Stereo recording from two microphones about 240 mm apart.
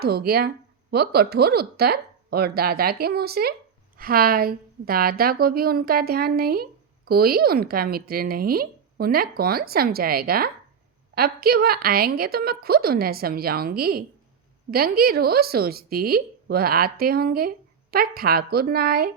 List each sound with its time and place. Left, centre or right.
0.0 s a woman's voice: right